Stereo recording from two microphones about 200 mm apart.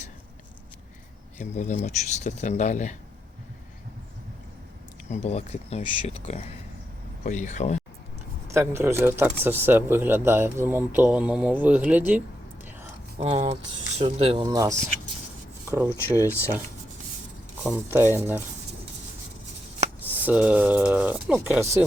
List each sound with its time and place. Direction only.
1.4 s speech: 35° left (ahead or behind)
5.0 s speech: 35° left (ahead or behind)
8.5 s speech: 15° right (ahead or behind)
13.1 s speech: 30° right (ahead or behind)
14.4 s speech: 15° right (ahead or behind)
16.1 s speech: 10° left (ahead or behind)
17.6 s speech: 10° right (ahead or behind)
20.2 s speech: 5° right (ahead or behind)